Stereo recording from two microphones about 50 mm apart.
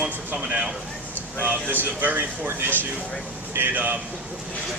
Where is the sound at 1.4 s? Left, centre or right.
Right.